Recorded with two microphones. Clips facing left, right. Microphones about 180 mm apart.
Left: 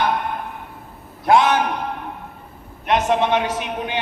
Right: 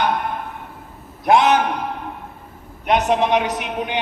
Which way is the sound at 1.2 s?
20° right (ahead or behind).